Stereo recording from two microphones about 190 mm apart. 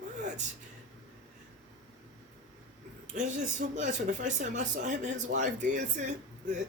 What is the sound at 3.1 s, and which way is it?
Speech, 40° right (ahead or behind).